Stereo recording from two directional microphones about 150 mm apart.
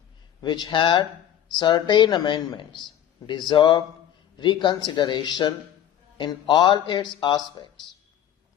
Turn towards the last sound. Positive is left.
turn(degrees=30)  # may be behind; listen again after turning